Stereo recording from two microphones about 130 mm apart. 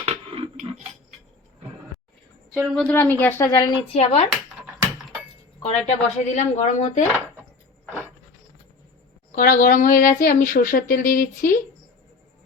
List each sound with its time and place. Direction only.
0.0 s a sound: 50° right (ahead or behind)
2.5 s a woman's voice: 5° left (ahead or behind)
2.9 s speech: 15° left (ahead or behind)
3.9 s speech: 55° left (ahead or behind)
5.6 s speech: 55° left (ahead or behind)
7.9 s a sound: 20° right (ahead or behind)
9.3 s speech: 90° left